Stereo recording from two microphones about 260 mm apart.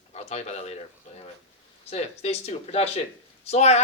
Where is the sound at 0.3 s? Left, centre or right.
Left.